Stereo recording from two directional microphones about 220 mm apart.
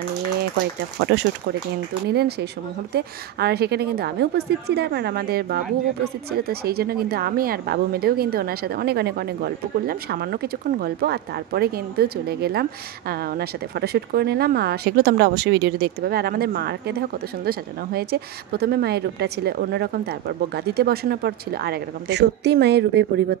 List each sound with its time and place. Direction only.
2.0 s a woman's voice: 45° right (ahead or behind)